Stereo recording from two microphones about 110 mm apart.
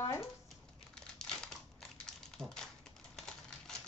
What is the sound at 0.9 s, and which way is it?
Crumpling, 5° left (ahead or behind).